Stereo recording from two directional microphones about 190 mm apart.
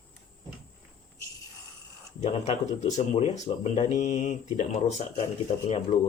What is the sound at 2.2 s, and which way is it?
Speech, 35° left (ahead or behind).